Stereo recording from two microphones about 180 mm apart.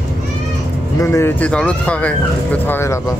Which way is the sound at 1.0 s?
15° left (ahead or behind).